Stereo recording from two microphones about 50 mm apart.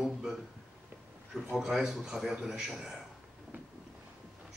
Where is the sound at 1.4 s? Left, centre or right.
Centre.